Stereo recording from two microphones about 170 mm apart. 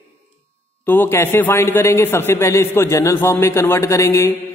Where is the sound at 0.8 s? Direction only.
10° left (ahead or behind).